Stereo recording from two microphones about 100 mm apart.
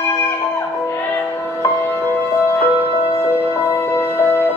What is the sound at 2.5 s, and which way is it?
Music, 25° left (ahead or behind).